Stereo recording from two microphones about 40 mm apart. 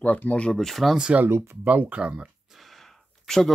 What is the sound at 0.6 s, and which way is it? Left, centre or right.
Speech, centre.